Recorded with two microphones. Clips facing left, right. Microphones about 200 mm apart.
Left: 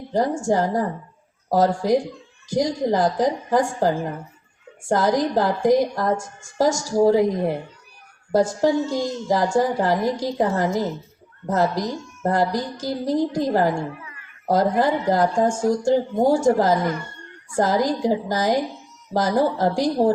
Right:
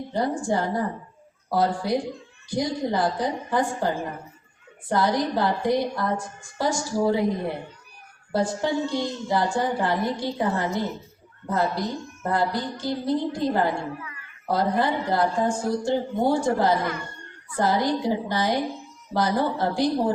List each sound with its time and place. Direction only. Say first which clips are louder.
0.1 s a woman's voice: left 5 dB; 45° left (ahead or behind)
8.3 s a woman's voice: left 6 dB; 40° left (ahead or behind)